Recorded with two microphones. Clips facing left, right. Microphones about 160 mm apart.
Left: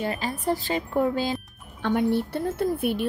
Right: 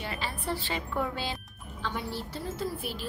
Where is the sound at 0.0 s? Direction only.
45° left (ahead or behind).